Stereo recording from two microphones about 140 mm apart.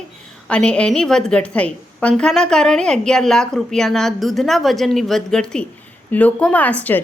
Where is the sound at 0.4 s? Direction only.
10° left (ahead or behind).